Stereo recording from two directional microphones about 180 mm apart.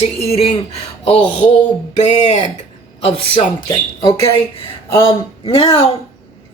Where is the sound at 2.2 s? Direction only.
40° left (ahead or behind).